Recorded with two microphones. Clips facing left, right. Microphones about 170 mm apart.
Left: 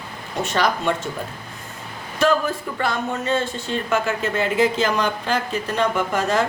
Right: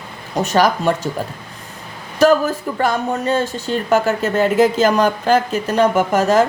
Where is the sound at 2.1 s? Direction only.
40° right (ahead or behind).